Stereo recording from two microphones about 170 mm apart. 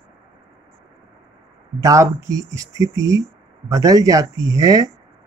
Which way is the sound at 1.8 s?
20° right (ahead or behind).